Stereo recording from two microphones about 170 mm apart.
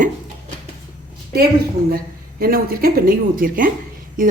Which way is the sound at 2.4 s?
60° right (ahead or behind).